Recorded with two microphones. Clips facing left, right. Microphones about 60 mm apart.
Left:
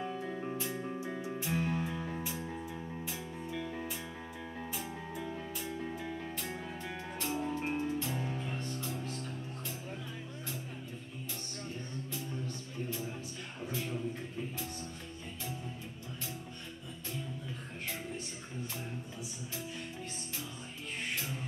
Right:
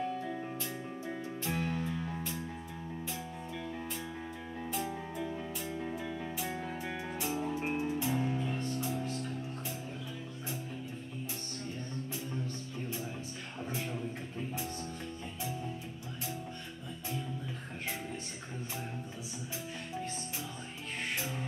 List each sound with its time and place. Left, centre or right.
0.1 s music: centre
1.2 s music: centre
4.7 s music: centre
6.5 s music: centre